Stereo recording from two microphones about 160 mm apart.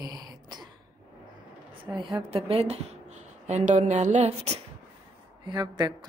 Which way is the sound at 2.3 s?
40° right (ahead or behind).